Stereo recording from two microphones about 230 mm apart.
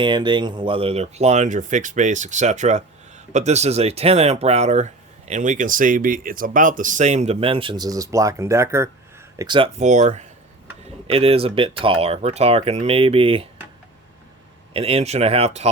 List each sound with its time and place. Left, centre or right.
0.0 s speech: centre
14.7 s speech: right